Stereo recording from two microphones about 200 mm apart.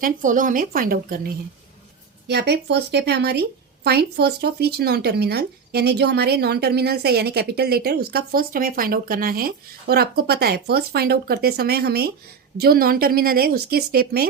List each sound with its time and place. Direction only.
0.0 s speech: 40° right (ahead or behind)